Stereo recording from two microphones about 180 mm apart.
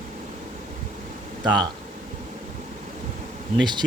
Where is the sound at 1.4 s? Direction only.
25° right (ahead or behind).